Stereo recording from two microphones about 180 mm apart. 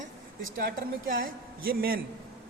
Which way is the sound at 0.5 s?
50° right (ahead or behind).